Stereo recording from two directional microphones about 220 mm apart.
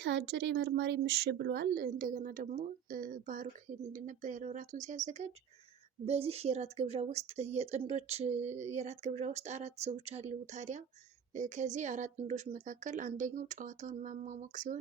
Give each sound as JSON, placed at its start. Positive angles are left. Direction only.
{"t": 0.0, "sound": "a woman's voice", "side_deg": -50}